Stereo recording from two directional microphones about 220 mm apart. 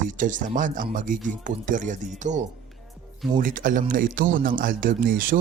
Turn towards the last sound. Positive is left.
turn(degrees=-40)  # may be behind; listen again after turning